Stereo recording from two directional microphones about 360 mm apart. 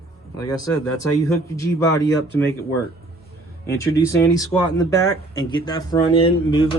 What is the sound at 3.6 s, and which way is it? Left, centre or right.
Speech, centre.